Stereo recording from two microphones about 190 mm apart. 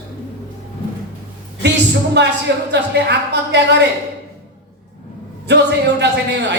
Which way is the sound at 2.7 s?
65° right (ahead or behind).